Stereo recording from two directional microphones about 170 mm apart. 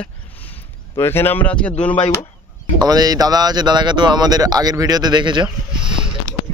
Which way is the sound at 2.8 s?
25° right (ahead or behind).